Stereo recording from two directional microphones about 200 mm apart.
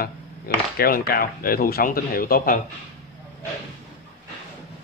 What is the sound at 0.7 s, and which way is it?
Speech, 50° left (ahead or behind).